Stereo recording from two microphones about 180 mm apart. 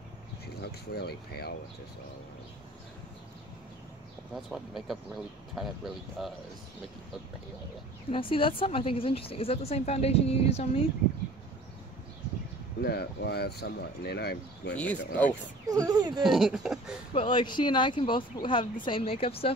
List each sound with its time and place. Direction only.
0.6 s speech: 60° left (ahead or behind)
4.4 s speech: centre (ahead or behind)
8.1 s speech: 30° left (ahead or behind)
12.8 s speech: 65° left (ahead or behind)
14.8 s speech: 10° left (ahead or behind)
15.7 s speech: 20° right (ahead or behind)
16.2 s speech: centre (ahead or behind)
17.1 s speech: 30° left (ahead or behind)